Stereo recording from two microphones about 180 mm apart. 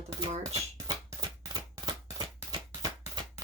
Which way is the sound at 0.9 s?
20° right (ahead or behind).